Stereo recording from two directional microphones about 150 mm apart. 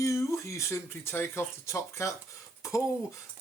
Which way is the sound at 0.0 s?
20° left (ahead or behind).